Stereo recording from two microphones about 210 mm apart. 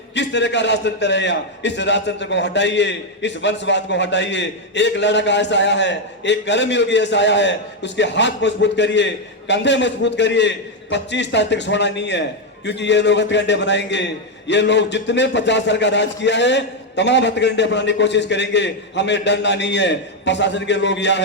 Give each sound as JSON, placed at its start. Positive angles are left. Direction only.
{"t": 0.1, "sound": "a man's voice", "side_deg": 55}